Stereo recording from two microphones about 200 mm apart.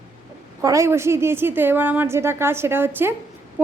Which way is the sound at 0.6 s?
15° right (ahead or behind).